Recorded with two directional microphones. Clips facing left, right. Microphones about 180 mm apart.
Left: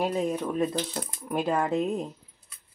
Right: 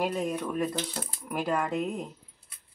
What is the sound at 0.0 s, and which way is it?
Speech, 25° left (ahead or behind).